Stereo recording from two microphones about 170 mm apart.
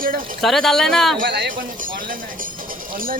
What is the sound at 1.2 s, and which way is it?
Speech, 65° right (ahead or behind).